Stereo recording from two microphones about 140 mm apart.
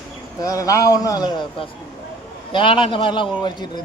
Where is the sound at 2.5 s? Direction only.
35° left (ahead or behind).